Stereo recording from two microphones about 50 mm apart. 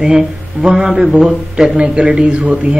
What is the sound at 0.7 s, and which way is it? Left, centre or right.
A man's voice, centre.